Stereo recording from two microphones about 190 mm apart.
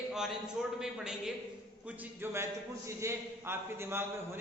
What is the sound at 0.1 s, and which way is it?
A man's voice, centre (ahead or behind).